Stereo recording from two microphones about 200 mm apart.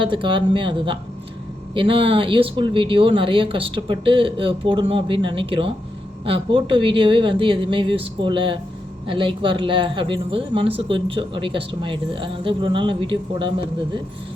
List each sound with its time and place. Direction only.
0.0 s speech: 25° right (ahead or behind)